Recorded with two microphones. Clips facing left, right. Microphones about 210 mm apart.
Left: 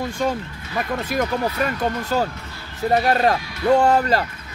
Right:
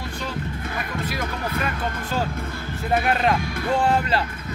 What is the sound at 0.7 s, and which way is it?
Speech, 50° left (ahead or behind).